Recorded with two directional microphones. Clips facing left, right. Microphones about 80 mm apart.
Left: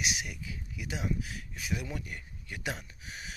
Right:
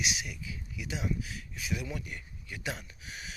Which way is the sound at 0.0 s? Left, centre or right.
Left.